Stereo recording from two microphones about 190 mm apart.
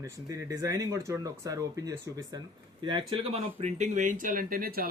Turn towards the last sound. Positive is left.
turn(degrees=-50)  # may be behind; listen again after turning